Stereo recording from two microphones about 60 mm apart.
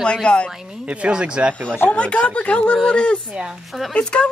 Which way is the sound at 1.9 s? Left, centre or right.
Centre.